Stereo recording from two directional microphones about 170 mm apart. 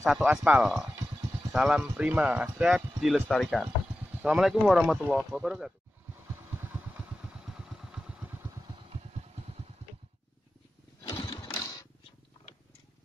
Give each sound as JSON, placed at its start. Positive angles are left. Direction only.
{"t": 0.0, "sound": "speech", "side_deg": -5}
{"t": 6.3, "sound": "vehicle", "side_deg": -15}
{"t": 11.4, "sound": "a sound", "side_deg": 20}